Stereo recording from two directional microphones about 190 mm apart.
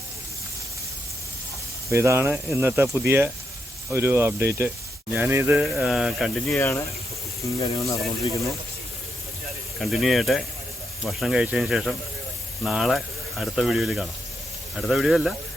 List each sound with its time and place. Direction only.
1.9 s speech: 15° right (ahead or behind)
6.5 s speech: 15° left (ahead or behind)
9.7 s speech: centre (ahead or behind)